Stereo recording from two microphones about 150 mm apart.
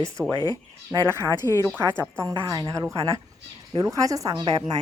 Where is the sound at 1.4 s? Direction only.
20° left (ahead or behind).